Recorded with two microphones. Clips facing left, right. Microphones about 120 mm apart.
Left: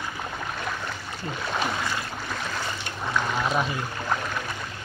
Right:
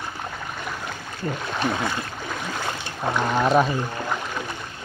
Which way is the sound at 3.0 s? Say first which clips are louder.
Right 5 dB; 45° right (ahead or behind).